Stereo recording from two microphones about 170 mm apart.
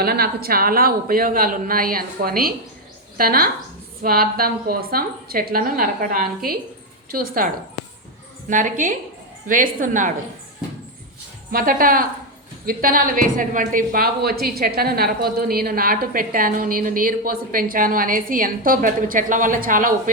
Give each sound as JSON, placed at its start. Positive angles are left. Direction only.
{"t": 0.0, "sound": "a woman's voice", "side_deg": -65}
{"t": 11.5, "sound": "a woman's voice", "side_deg": -55}